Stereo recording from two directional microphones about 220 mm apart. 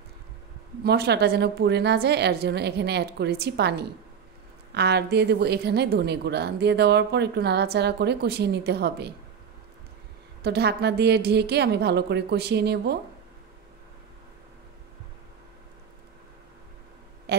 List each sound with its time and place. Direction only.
0.8 s a woman's voice: 50° right (ahead or behind)
10.4 s a woman's voice: 50° right (ahead or behind)
17.3 s a sound: 50° right (ahead or behind)